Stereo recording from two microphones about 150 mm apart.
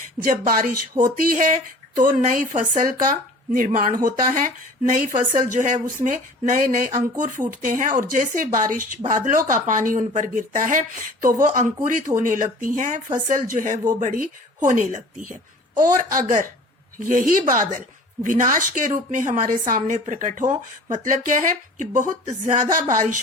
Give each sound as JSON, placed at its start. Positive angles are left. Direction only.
{"t": 0.2, "sound": "a woman's voice", "side_deg": -75}